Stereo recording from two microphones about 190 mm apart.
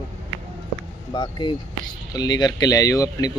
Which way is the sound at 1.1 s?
20° left (ahead or behind).